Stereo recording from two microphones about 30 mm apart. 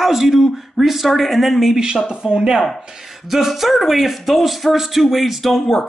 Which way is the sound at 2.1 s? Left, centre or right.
Right.